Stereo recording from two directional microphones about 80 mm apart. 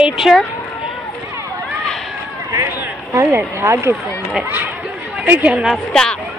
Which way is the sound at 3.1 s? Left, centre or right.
Right.